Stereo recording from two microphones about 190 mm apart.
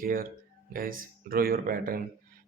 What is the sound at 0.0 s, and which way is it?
Speech, 50° right (ahead or behind).